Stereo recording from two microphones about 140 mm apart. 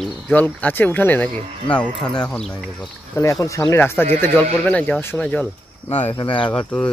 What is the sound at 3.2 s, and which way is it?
Speech, 25° left (ahead or behind).